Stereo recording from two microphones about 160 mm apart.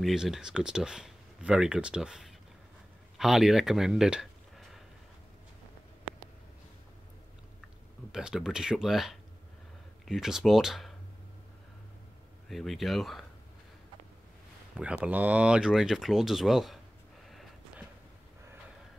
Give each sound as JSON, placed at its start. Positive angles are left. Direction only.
{"t": 0.0, "sound": "speech", "side_deg": 0}
{"t": 8.1, "sound": "speech", "side_deg": -5}
{"t": 12.4, "sound": "speech", "side_deg": 0}
{"t": 14.8, "sound": "speech", "side_deg": -10}
{"t": 17.3, "sound": "a sound", "side_deg": 0}